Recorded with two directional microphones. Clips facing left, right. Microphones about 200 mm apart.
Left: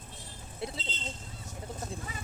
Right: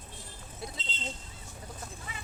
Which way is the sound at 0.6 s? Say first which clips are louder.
Left 5 dB; 25° left (ahead or behind).